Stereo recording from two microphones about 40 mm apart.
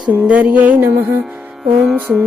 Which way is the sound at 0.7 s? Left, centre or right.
Right.